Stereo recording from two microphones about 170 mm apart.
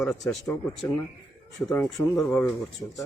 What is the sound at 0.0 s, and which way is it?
Speech, centre (ahead or behind).